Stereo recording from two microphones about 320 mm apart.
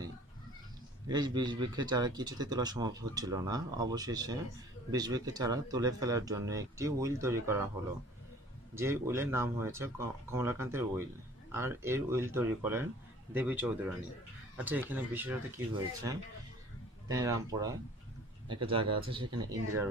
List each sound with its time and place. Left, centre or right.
1.0 s speech: centre
8.7 s speech: centre